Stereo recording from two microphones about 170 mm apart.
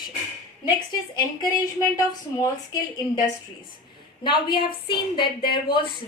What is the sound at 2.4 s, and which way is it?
Speech, 25° left (ahead or behind).